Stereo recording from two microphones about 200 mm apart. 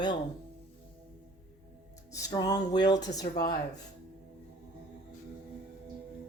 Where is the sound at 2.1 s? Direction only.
15° left (ahead or behind).